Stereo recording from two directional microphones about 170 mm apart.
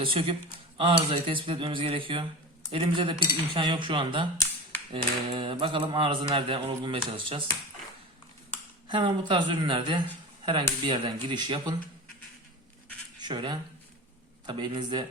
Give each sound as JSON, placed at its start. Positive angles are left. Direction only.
{"t": 0.0, "sound": "speech", "side_deg": -35}
{"t": 8.9, "sound": "speech", "side_deg": -30}
{"t": 13.2, "sound": "speech", "side_deg": -25}